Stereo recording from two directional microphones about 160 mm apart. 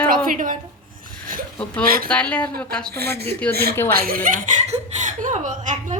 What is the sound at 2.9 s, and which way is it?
Speech, 90° right.